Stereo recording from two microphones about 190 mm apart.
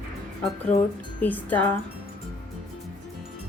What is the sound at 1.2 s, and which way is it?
Speech, 10° left (ahead or behind).